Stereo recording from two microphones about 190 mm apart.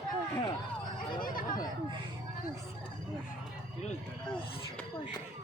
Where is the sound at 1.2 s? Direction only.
50° left (ahead or behind).